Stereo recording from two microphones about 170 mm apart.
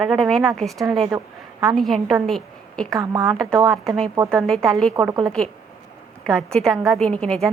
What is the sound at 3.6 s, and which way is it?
A woman's voice, centre (ahead or behind).